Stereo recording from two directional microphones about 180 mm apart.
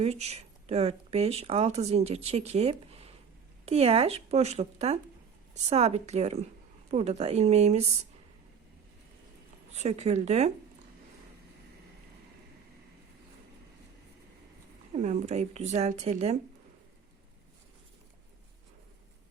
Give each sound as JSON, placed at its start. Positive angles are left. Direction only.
{"t": 0.0, "sound": "speech", "side_deg": -35}
{"t": 9.7, "sound": "speech", "side_deg": -40}
{"t": 14.9, "sound": "speech", "side_deg": -40}